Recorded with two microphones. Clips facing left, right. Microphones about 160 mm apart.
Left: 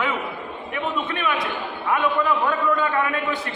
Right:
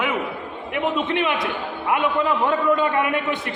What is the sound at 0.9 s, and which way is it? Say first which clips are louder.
A man's voice: right 1 dB; 20° right (ahead or behind).